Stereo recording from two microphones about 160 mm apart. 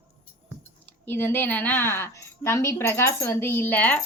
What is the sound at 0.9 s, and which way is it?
A woman's voice, 10° left (ahead or behind).